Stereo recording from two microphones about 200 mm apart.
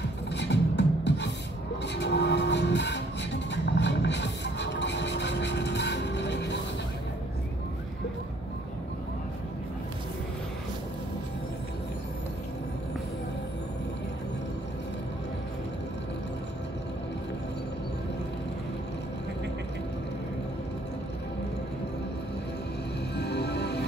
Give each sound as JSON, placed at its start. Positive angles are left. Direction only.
{"t": 0.3, "sound": "music", "side_deg": 60}
{"t": 23.1, "sound": "music", "side_deg": 55}